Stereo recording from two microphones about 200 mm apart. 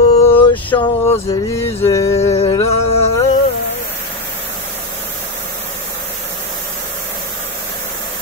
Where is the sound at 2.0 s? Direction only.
30° left (ahead or behind).